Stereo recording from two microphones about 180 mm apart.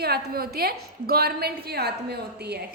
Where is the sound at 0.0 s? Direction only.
60° right (ahead or behind).